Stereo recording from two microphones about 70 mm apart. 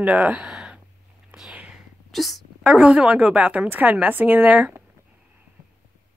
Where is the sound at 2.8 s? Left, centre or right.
Centre.